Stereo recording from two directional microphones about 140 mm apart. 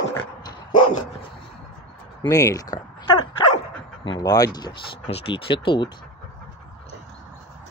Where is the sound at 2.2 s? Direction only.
25° left (ahead or behind).